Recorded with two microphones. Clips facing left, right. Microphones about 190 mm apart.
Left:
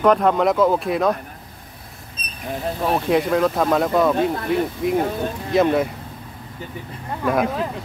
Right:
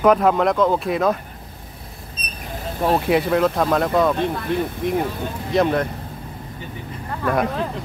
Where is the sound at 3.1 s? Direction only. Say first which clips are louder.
Left 2 dB; centre (ahead or behind).